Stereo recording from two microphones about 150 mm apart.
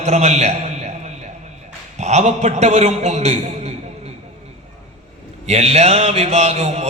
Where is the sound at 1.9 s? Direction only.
50° right (ahead or behind).